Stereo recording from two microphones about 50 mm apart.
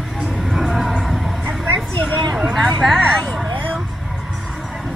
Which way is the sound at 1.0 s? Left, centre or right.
Centre.